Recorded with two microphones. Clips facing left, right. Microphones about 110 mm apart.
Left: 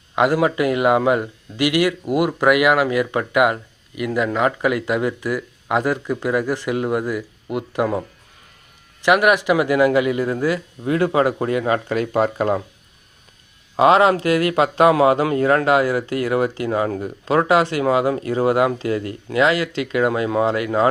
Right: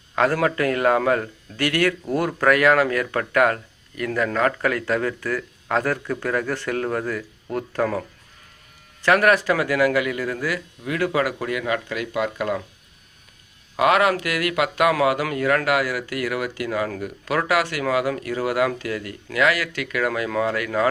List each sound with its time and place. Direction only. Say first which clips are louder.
0.2 s a man's voice: left 3 dB; 15° left (ahead or behind)
9.0 s speech: left 2 dB; 15° left (ahead or behind); by 12.6 s 35° left (ahead or behind)
13.7 s speech: left 5 dB; 25° left (ahead or behind)